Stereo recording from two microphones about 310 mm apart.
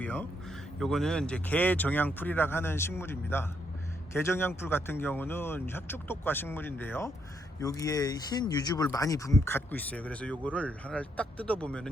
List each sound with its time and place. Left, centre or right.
0.0 s speech: centre